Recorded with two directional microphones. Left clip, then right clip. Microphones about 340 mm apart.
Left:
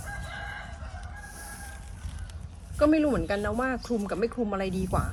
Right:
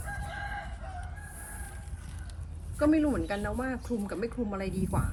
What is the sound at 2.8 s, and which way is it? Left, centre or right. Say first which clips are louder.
Speech: left 3 dB; left.